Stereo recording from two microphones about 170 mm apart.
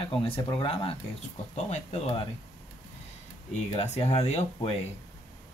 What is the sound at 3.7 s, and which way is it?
Speech, 40° left (ahead or behind).